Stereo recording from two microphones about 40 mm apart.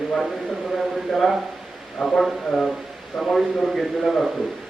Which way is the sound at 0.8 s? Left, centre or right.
Centre.